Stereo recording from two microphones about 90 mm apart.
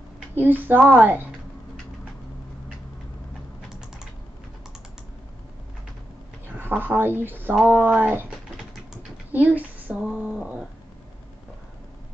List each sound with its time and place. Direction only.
0.3 s speech: 20° right (ahead or behind)
6.4 s speech: 25° right (ahead or behind)
9.3 s speech: 15° right (ahead or behind)
10.1 s a sound: 10° right (ahead or behind)